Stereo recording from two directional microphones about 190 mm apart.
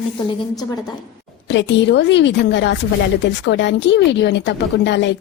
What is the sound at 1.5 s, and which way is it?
Speech, 70° left (ahead or behind).